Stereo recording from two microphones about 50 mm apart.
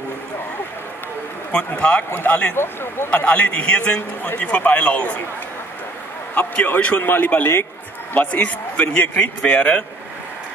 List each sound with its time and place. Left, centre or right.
1.8 s a man's voice: left
2.5 s speech: left
3.1 s a man's voice: left
6.3 s a man's voice: left